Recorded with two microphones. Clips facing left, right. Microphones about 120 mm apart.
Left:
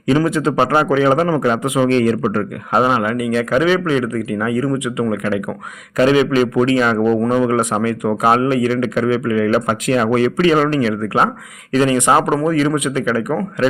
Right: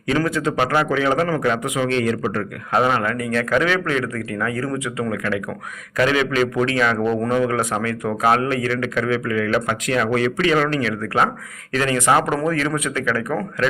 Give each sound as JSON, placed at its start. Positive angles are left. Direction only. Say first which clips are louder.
{"t": 0.1, "sound": "a man's voice", "louder": "left 5 dB", "side_deg": 25}
{"t": 2.7, "sound": "a man's voice", "louder": "left 3 dB", "side_deg": 20}